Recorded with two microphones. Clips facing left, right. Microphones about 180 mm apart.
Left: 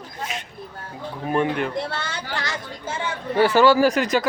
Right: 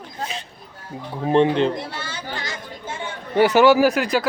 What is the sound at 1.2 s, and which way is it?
Speech, 25° right (ahead or behind).